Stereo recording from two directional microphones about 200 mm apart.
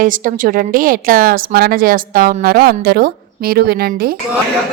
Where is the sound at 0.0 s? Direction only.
45° right (ahead or behind).